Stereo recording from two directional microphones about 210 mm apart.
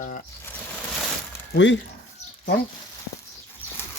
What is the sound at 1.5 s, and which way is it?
Speech, 60° left (ahead or behind).